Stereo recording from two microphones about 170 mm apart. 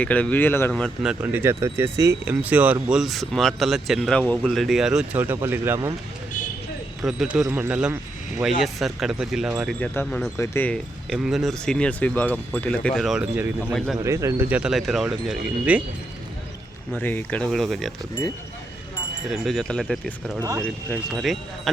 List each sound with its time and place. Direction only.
0.0 s a man's voice: 10° left (ahead or behind)
1.2 s a man's voice: 15° right (ahead or behind)
7.0 s a man's voice: centre (ahead or behind)
9.6 s speech: 10° left (ahead or behind)
11.1 s a man's voice: centre (ahead or behind)
16.9 s a man's voice: 10° left (ahead or behind)
19.3 s a man's voice: centre (ahead or behind)
20.4 s speech: 20° right (ahead or behind)
20.9 s a man's voice: centre (ahead or behind)